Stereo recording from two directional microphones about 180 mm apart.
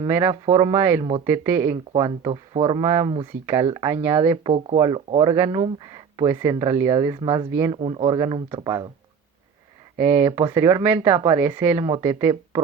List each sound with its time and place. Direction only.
0.1 s speech: 15° right (ahead or behind)
1.7 s speech: 30° right (ahead or behind)
10.0 s speech: 10° right (ahead or behind)